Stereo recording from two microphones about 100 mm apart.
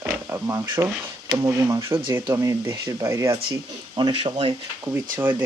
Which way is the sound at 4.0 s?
50° right (ahead or behind).